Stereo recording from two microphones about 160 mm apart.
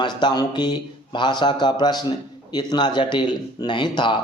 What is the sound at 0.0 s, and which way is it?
Speech, 25° left (ahead or behind).